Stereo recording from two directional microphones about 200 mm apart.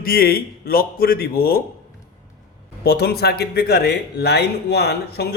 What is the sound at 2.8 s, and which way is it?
Speech, 55° left (ahead or behind).